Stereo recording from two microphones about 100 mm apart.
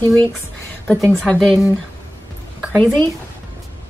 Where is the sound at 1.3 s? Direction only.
5° left (ahead or behind).